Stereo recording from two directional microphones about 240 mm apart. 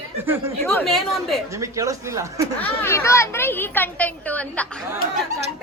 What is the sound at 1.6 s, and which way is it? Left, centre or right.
Speech, centre.